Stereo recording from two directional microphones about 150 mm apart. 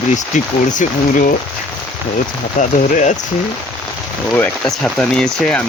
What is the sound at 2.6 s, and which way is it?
Speech, 50° left (ahead or behind).